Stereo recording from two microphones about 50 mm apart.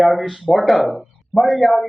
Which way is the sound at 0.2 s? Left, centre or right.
Centre.